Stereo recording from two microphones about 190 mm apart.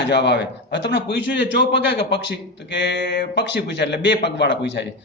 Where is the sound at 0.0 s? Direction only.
65° left (ahead or behind).